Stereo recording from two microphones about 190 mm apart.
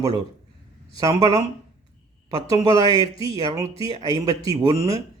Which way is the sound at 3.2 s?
15° right (ahead or behind).